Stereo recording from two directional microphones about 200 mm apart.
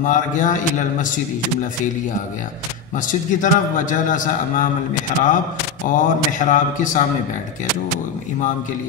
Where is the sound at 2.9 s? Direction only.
40° left (ahead or behind).